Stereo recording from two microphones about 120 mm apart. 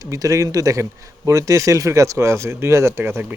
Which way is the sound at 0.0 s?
30° right (ahead or behind).